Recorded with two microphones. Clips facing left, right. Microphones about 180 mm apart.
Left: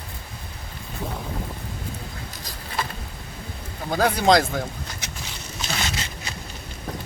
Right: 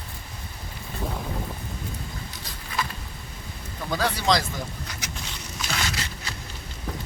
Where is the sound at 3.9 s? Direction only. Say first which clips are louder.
Left 5 dB; 50° left (ahead or behind).